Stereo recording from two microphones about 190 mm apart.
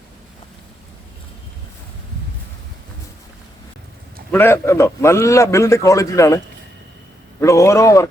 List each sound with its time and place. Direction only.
4.3 s a man's voice: 10° left (ahead or behind)
7.4 s a man's voice: 15° left (ahead or behind)